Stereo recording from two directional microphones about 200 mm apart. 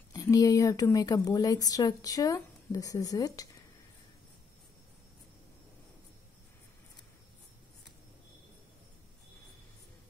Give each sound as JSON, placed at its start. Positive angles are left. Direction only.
{"t": 0.1, "sound": "speech", "side_deg": 20}